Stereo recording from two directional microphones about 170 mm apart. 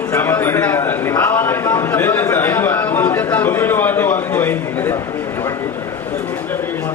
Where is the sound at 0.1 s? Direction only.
10° left (ahead or behind).